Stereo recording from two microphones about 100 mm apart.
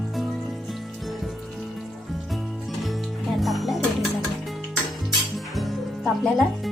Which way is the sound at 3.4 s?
Centre (ahead or behind).